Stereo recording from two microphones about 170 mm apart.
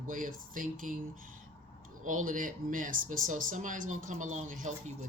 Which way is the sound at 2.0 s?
50° right (ahead or behind).